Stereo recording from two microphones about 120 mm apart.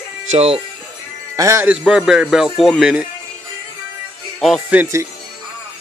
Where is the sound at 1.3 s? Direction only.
25° right (ahead or behind).